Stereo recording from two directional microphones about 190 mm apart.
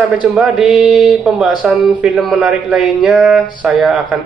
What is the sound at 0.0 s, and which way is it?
Speech, 5° right (ahead or behind).